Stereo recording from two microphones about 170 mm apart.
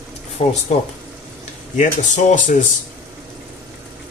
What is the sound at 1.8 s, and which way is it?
Speech, 45° left (ahead or behind).